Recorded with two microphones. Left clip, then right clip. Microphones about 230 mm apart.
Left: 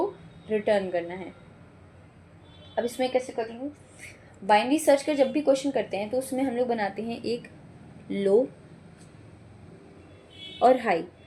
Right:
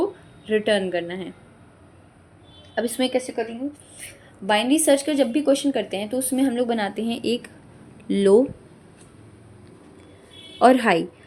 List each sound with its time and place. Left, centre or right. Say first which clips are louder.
0.4 s a woman's voice: right 4 dB; right
2.7 s a woman's voice: right 3 dB; right
10.6 s a woman's voice: right 5 dB; right